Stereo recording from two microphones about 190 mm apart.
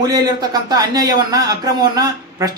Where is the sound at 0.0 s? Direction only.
20° right (ahead or behind).